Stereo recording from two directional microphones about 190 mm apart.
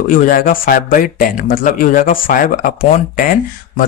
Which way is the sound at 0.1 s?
50° left (ahead or behind).